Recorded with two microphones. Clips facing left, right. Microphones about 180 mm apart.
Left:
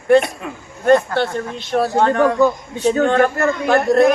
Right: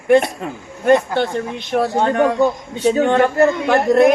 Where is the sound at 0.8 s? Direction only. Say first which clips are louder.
Even; 15° right (ahead or behind).